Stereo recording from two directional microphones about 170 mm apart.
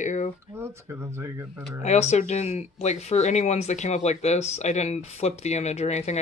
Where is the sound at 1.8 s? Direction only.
40° left (ahead or behind).